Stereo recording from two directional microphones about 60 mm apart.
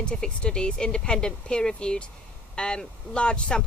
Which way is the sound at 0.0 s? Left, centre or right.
Centre.